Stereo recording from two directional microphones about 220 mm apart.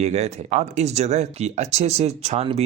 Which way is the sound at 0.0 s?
30° right (ahead or behind).